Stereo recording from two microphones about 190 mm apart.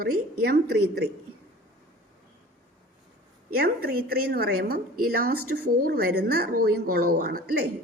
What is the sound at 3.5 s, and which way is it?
A woman's voice, 55° right (ahead or behind).